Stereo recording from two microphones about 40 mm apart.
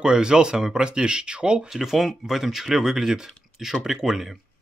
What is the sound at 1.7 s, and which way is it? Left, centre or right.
Speech, centre.